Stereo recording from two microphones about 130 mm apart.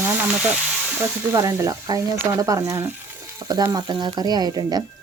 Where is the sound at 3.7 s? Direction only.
35° right (ahead or behind).